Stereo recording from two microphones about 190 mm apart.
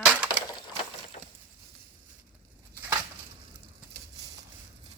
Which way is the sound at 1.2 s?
30° left (ahead or behind).